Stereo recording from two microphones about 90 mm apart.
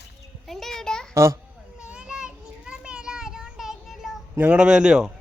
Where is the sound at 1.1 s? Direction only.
30° right (ahead or behind).